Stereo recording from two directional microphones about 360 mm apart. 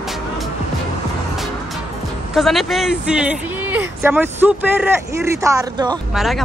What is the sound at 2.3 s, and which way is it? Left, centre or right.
Speech, centre.